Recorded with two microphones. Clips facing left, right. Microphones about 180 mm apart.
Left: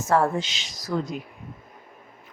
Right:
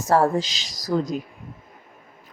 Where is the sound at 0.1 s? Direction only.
35° right (ahead or behind).